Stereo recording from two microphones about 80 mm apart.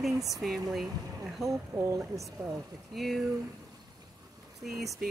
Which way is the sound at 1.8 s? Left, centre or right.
Right.